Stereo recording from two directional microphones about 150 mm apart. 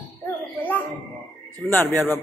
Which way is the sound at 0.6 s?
10° left (ahead or behind).